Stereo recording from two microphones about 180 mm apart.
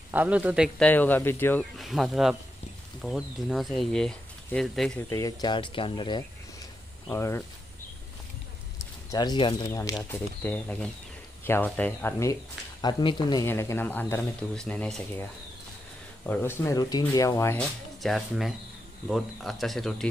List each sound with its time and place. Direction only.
0.1 s speech: 10° right (ahead or behind)
0.7 s speech: 10° left (ahead or behind)
1.6 s speech: centre (ahead or behind)
5.1 s speech: 20° left (ahead or behind)
7.1 s speech: 15° left (ahead or behind)
9.1 s speech: 25° left (ahead or behind)
12.8 s speech: 25° left (ahead or behind); by 15.2 s 5° left (ahead or behind)
16.3 s speech: 15° left (ahead or behind)
18.0 s speech: centre (ahead or behind)